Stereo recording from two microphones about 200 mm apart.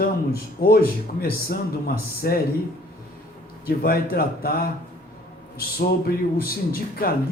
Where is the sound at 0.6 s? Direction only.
45° left (ahead or behind).